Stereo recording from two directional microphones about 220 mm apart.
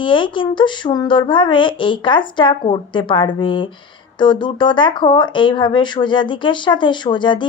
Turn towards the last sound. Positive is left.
turn(degrees=20)  # may be behind; listen again after turning